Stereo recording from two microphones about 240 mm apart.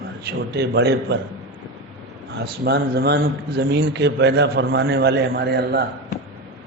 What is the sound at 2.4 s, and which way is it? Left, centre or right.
A man's voice, right.